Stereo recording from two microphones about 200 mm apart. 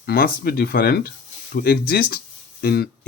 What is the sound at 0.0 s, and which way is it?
Speech, 50° left (ahead or behind).